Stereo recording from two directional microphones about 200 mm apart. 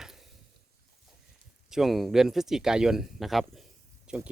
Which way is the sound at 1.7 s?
Centre (ahead or behind).